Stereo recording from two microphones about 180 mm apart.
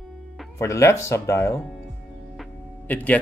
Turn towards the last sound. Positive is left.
turn(degrees=10)  # may be behind; listen again after turning